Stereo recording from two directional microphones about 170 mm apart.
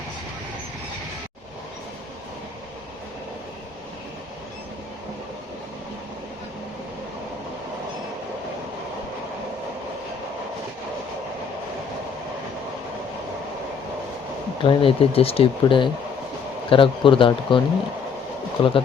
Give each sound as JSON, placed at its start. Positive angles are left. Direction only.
{"t": 14.6, "sound": "speech", "side_deg": 30}
{"t": 18.6, "sound": "speech", "side_deg": 30}